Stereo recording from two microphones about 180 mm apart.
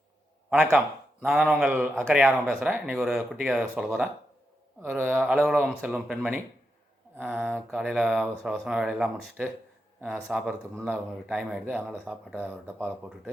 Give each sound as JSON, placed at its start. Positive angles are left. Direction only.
{"t": 0.5, "sound": "speech", "side_deg": -10}
{"t": 7.5, "sound": "speech", "side_deg": 0}